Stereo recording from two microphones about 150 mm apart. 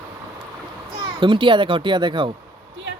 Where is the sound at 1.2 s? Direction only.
35° right (ahead or behind).